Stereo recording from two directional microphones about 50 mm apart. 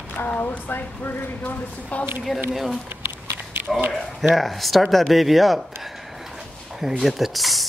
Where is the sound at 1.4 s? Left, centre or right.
Left.